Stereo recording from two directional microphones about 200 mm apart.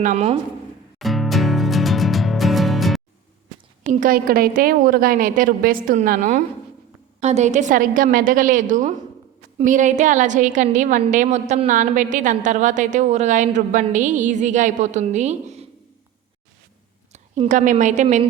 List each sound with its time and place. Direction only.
0.0 s a woman's voice: 35° right (ahead or behind)
0.9 s music: centre (ahead or behind)
4.0 s a woman's voice: 45° right (ahead or behind)
17.1 s a woman's voice: 35° right (ahead or behind)